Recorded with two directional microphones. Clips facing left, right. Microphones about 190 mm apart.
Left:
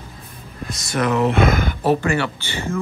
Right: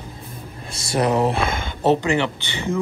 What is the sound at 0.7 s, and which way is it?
Speech, 30° right (ahead or behind).